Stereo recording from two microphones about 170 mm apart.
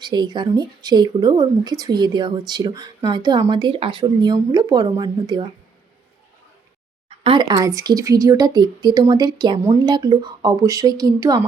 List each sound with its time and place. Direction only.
0.0 s a woman's voice: 25° right (ahead or behind)
7.3 s a woman's voice: 25° right (ahead or behind)